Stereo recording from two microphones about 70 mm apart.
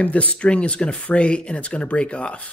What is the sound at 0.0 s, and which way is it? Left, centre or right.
Speech, centre.